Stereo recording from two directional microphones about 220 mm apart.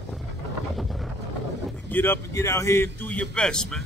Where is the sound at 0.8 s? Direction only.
Centre (ahead or behind).